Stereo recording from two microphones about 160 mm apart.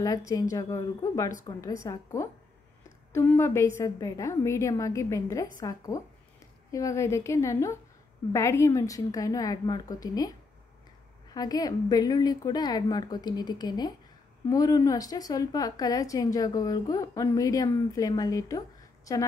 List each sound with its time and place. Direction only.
0.0 s a woman's voice: 20° left (ahead or behind)